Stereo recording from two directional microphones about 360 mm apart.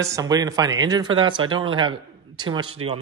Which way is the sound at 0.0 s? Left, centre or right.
Centre.